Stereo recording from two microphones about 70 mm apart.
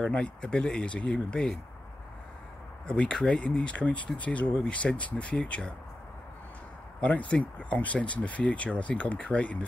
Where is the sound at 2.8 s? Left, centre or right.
Centre.